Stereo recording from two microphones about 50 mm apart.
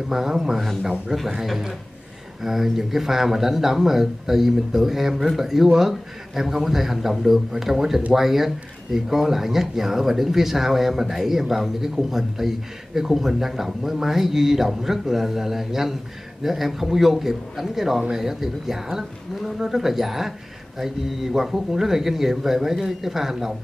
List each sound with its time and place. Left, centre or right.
0.1 s speech: centre